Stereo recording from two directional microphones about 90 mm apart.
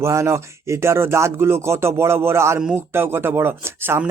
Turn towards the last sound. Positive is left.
turn(degrees=-25)  # may be behind; listen again after turning